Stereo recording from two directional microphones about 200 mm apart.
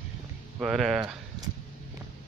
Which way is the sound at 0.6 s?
Centre (ahead or behind).